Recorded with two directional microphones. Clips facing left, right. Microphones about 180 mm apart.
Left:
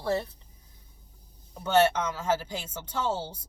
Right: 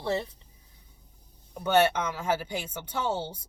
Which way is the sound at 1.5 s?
15° right (ahead or behind).